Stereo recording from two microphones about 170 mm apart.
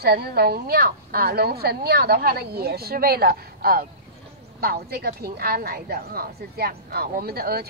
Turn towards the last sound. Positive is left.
turn(degrees=-65)  # may be behind; listen again after turning